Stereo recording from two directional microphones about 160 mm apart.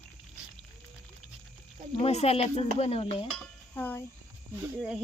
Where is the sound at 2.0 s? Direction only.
40° left (ahead or behind).